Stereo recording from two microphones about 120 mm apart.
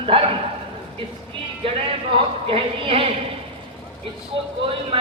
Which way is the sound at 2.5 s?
50° right (ahead or behind).